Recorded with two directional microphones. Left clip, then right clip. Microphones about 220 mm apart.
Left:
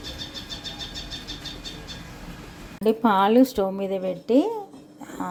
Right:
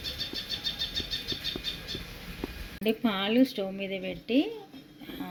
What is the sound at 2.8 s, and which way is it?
A woman's voice, 20° left (ahead or behind).